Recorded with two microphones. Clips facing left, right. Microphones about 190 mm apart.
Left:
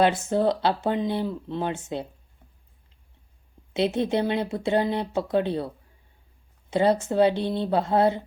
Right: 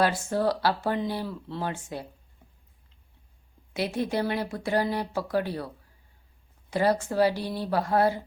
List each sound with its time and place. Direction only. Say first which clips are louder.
0.0 s speech: left 4 dB; 20° left (ahead or behind)
3.8 s speech: left 4 dB; 25° left (ahead or behind)